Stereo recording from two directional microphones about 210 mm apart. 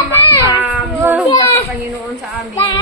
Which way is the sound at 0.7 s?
5° right (ahead or behind).